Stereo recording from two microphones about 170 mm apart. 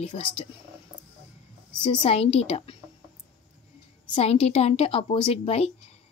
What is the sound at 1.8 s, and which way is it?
Speech, 30° left (ahead or behind).